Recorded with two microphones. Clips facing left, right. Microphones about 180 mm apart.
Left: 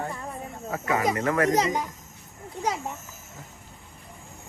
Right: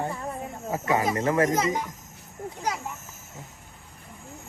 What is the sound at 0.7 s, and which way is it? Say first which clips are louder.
Speech: right 1 dB; 25° right (ahead or behind).